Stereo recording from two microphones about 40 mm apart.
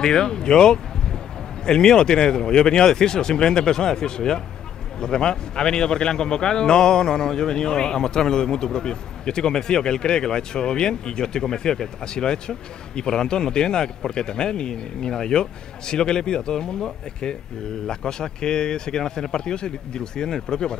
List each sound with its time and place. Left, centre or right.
0.0 s a man's voice: centre